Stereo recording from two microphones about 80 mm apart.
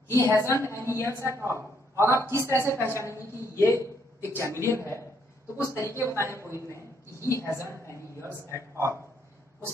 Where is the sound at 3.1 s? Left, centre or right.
Left.